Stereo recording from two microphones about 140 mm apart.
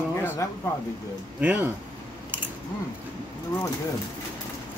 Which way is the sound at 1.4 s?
15° right (ahead or behind).